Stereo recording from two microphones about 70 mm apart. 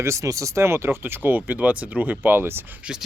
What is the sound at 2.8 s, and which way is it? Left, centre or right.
Speech, centre.